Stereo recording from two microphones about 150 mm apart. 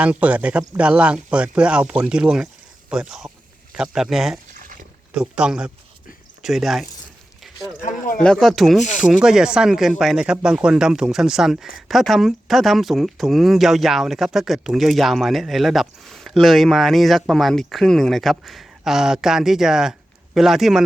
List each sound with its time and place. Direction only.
0.0 s speech: 10° right (ahead or behind)
4.6 s a sound: 65° right (ahead or behind)
5.1 s speech: 5° right (ahead or behind)
8.2 s speech: 5° left (ahead or behind)